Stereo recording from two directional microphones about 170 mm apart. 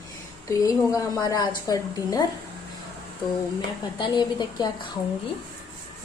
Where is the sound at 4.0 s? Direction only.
25° left (ahead or behind).